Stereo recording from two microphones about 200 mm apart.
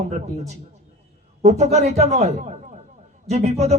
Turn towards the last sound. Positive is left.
turn(degrees=-35)  # may be behind; listen again after turning